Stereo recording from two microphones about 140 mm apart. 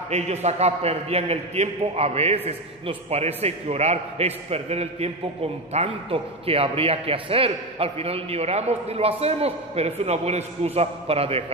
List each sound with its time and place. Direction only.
0.1 s a man's voice: 50° right (ahead or behind)